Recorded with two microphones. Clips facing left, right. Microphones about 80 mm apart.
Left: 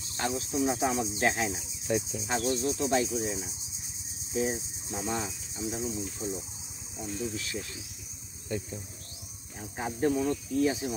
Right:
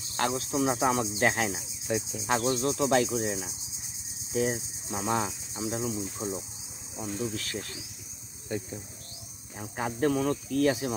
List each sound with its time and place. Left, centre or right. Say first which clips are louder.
0.2 s speech: right 2 dB; right
1.9 s cricket: left 1 dB; centre
2.2 s speech: right 5 dB; right
4.5 s cricket: right 2 dB; right
7.0 s speech: right 2 dB; right
8.5 s speech: right 1 dB; right
9.8 s speech: right 1 dB; right